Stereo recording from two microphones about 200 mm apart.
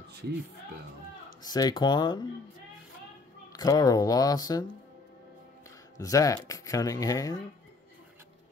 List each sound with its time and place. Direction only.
0.1 s speech: 55° right (ahead or behind)
1.4 s speech: 20° left (ahead or behind)
3.5 s speech: 20° left (ahead or behind)
5.9 s speech: 15° left (ahead or behind)